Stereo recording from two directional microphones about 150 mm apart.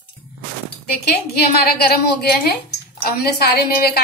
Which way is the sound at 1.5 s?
90° left.